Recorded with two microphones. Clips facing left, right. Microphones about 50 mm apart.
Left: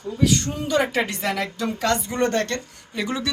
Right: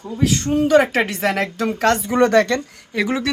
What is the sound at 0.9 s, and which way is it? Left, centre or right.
Speech, right.